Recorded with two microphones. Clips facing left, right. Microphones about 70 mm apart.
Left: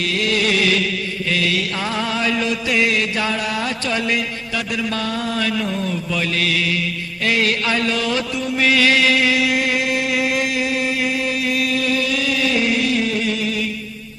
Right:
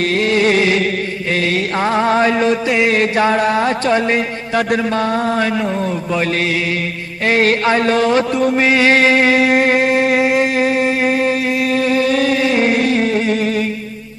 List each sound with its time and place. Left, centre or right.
0.0 s a sound: right
1.3 s mantra: right
8.6 s music: right